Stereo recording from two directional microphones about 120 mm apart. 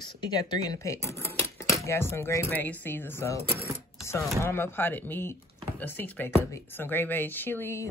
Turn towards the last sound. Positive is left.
turn(degrees=20)  # may be behind; listen again after turning